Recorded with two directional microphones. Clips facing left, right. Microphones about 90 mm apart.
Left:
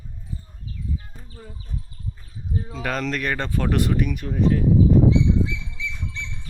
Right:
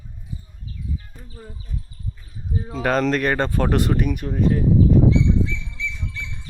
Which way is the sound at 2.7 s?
40° right (ahead or behind).